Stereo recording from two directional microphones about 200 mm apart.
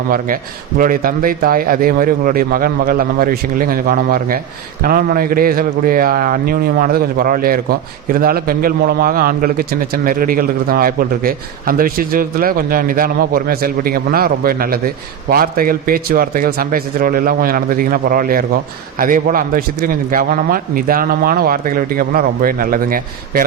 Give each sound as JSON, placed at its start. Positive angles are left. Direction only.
{"t": 0.8, "sound": "speech", "side_deg": -45}